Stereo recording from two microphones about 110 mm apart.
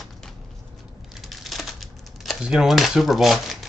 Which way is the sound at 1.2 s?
Centre (ahead or behind).